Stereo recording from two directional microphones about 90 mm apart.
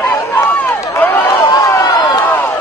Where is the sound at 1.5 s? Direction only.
40° left (ahead or behind).